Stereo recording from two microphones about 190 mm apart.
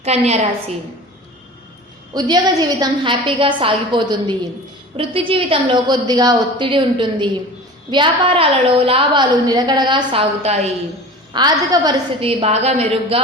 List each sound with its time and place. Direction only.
0.0 s a woman's voice: 35° right (ahead or behind)
2.1 s a woman's voice: 20° right (ahead or behind)
11.3 s a woman's voice: 20° right (ahead or behind)